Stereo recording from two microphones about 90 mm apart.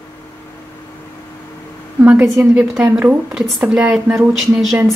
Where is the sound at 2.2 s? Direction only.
5° right (ahead or behind).